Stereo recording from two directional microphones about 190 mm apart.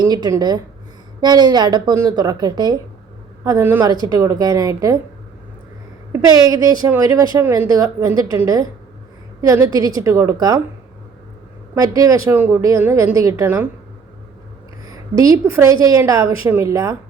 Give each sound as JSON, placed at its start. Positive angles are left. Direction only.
{"t": 0.1, "sound": "a woman's voice", "side_deg": -20}
{"t": 6.2, "sound": "a woman's voice", "side_deg": -20}
{"t": 11.7, "sound": "a woman's voice", "side_deg": -20}
{"t": 14.8, "sound": "a woman's voice", "side_deg": -20}